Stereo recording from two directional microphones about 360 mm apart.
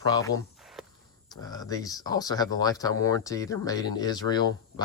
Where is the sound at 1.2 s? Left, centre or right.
Centre.